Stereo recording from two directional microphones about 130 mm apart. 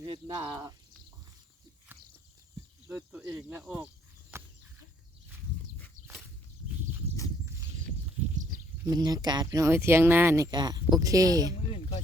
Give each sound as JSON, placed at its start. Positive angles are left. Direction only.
{"t": 0.0, "sound": "speech", "side_deg": -35}
{"t": 2.8, "sound": "speech", "side_deg": -10}
{"t": 4.3, "sound": "a sound", "side_deg": -20}
{"t": 8.9, "sound": "speech", "side_deg": -30}
{"t": 10.5, "sound": "speech", "side_deg": -35}